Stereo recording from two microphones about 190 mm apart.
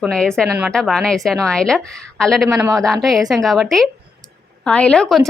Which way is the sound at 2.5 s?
15° right (ahead or behind).